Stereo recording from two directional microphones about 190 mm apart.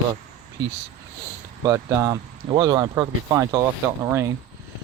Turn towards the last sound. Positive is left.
turn(degrees=-15)  # may be behind; listen again after turning